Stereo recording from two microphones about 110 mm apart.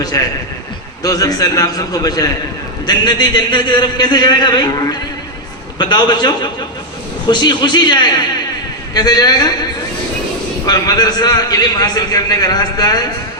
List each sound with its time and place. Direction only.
0.0 s a man's voice: 35° left (ahead or behind)
10.7 s a man's voice: 35° left (ahead or behind)